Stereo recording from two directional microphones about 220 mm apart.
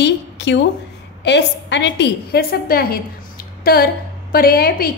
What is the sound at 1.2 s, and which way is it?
A woman's voice, 50° left (ahead or behind).